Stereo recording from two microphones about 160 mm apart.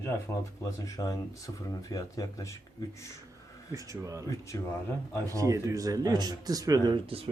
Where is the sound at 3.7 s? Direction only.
20° right (ahead or behind).